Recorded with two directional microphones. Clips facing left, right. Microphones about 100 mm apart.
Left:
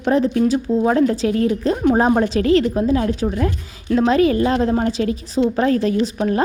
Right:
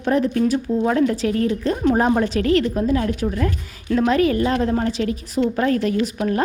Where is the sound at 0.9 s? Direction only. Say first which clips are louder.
Left 2 dB; 30° left (ahead or behind).